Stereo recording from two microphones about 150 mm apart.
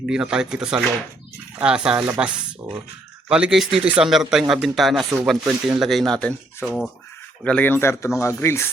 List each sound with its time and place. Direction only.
0.0 s speech: 5° right (ahead or behind); by 8.7 s 15° left (ahead or behind)